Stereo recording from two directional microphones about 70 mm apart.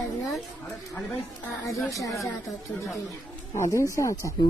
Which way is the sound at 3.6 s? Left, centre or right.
Left.